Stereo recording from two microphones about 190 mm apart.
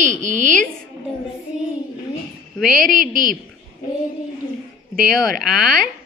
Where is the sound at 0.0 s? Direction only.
40° right (ahead or behind).